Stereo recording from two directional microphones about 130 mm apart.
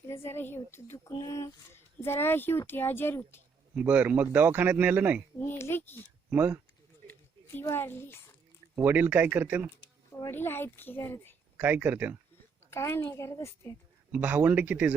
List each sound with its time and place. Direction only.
0.1 s a woman's voice: 20° left (ahead or behind)
3.8 s a man's voice: 10° right (ahead or behind)
5.4 s a woman's voice: 20° left (ahead or behind)
6.3 s a man's voice: 15° right (ahead or behind)
7.1 s speech: 15° left (ahead or behind)
8.7 s a man's voice: 15° right (ahead or behind)
10.2 s speech: 20° left (ahead or behind)
11.5 s a man's voice: 15° right (ahead or behind)
12.7 s a woman's voice: 20° left (ahead or behind)
14.1 s a man's voice: 10° right (ahead or behind)